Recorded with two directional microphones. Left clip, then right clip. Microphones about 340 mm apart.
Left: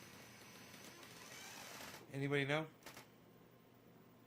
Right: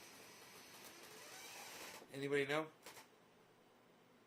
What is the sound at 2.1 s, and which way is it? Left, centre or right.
Speech, left.